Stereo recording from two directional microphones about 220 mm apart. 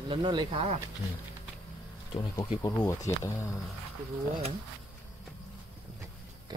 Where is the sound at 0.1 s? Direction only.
20° right (ahead or behind).